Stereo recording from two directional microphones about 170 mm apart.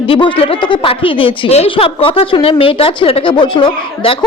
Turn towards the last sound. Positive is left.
turn(degrees=30)  # may be behind; listen again after turning